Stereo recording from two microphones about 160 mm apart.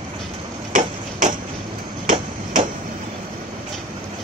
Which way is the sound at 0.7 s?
55° right (ahead or behind).